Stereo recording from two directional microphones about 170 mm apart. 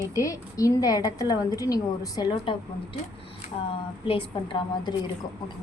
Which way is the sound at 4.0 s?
30° left (ahead or behind).